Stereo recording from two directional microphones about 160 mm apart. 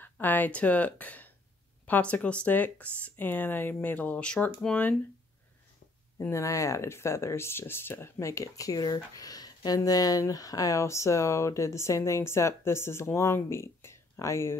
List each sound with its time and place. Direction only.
0.0 s speech: 10° left (ahead or behind)
6.1 s speech: 20° left (ahead or behind)